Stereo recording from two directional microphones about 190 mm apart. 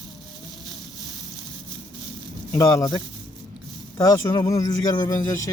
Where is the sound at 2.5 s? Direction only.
20° left (ahead or behind).